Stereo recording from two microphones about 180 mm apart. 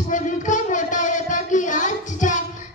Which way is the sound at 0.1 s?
45° left (ahead or behind).